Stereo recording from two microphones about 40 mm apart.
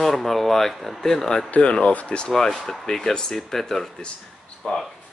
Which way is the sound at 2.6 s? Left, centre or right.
Centre.